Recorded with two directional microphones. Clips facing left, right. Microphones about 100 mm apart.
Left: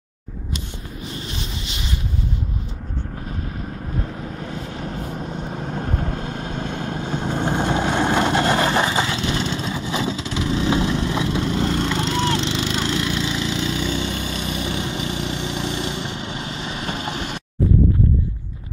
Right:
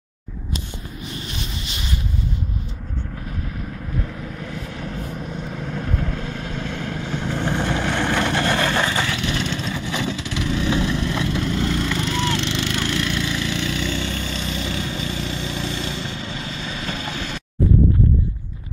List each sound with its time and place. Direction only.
4.4 s vehicle: 30° left (ahead or behind)